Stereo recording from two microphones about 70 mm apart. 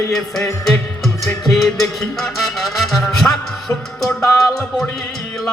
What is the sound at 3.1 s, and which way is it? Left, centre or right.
Music, centre.